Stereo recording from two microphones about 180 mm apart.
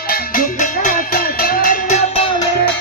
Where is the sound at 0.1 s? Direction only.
50° left (ahead or behind).